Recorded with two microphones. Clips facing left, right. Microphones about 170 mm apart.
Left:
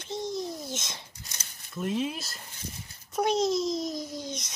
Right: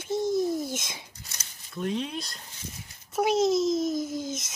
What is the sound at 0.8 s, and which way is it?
A child's voice, 5° right (ahead or behind).